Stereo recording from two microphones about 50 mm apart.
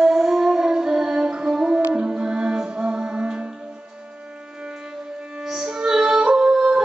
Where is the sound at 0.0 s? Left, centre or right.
Centre.